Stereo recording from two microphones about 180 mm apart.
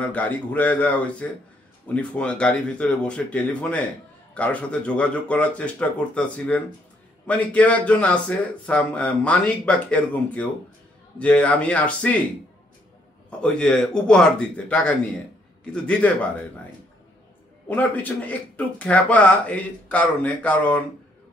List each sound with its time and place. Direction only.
0.0 s speech: 10° left (ahead or behind)
13.4 s speech: 5° left (ahead or behind)
17.6 s speech: 10° left (ahead or behind)